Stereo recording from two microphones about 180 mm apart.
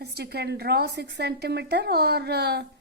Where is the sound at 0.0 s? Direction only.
65° right (ahead or behind).